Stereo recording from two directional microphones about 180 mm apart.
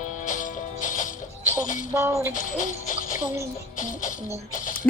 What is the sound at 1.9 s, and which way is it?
Music, 15° right (ahead or behind).